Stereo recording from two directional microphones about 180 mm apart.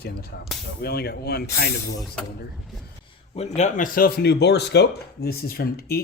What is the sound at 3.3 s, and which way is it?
Speech, 40° left (ahead or behind).